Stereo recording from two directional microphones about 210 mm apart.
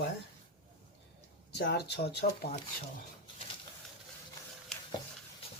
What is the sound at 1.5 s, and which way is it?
Speech, 50° left (ahead or behind).